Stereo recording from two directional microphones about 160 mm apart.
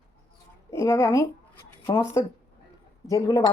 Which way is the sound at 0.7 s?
20° left (ahead or behind).